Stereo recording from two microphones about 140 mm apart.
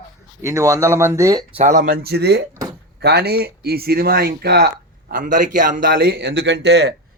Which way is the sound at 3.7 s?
90° right.